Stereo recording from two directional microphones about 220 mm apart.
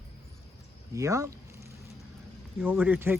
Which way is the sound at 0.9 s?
15° right (ahead or behind).